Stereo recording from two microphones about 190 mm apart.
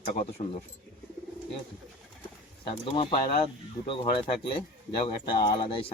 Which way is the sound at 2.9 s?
30° left (ahead or behind).